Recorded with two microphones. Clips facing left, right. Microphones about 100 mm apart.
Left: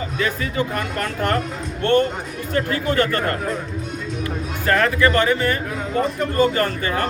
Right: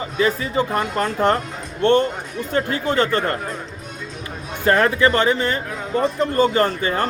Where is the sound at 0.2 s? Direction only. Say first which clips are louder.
Right 4 dB; 20° right (ahead or behind).